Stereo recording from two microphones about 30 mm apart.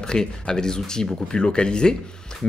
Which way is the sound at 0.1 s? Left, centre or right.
Left.